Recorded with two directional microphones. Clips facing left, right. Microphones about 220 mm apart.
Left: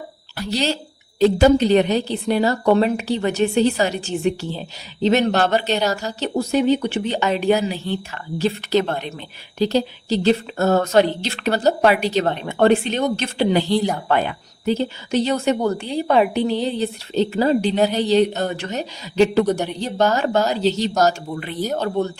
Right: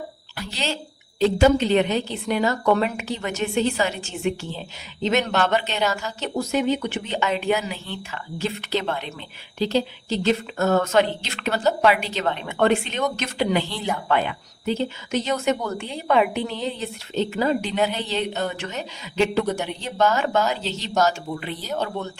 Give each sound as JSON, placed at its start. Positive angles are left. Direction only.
{"t": 0.3, "sound": "a woman's voice", "side_deg": 40}